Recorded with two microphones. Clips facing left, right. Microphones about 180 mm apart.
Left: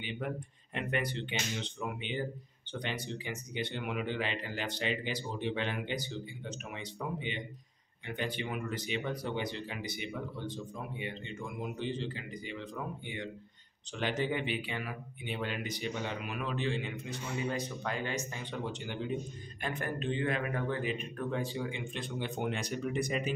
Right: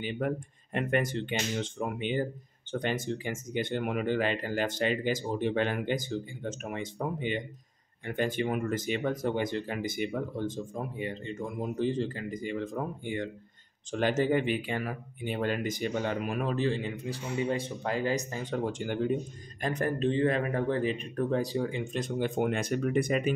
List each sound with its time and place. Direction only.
0.2 s speech: 50° right (ahead or behind)